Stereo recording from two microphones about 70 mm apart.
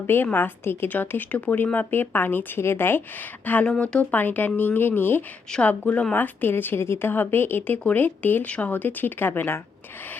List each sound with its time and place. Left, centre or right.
0.1 s a woman's voice: left
3.7 s speech: centre
4.1 s a woman's voice: left
5.6 s a woman's voice: left